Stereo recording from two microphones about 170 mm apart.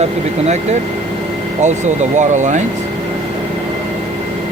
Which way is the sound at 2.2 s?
45° right (ahead or behind).